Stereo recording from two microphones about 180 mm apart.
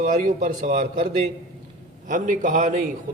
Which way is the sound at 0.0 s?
45° right (ahead or behind).